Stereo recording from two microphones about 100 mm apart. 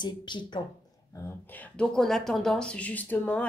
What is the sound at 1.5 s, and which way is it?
Speech, 15° left (ahead or behind).